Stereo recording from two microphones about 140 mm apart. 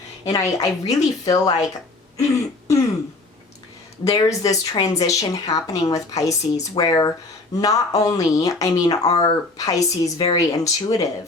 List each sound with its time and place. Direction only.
0.3 s speech: 25° left (ahead or behind)
2.1 s throat clearing: 25° left (ahead or behind)
4.0 s speech: 25° left (ahead or behind)